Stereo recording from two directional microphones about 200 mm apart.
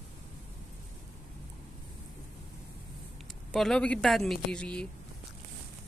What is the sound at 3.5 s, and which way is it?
Speech, centre (ahead or behind).